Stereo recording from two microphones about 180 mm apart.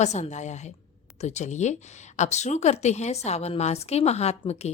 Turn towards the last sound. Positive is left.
turn(degrees=35)  # may be behind; listen again after turning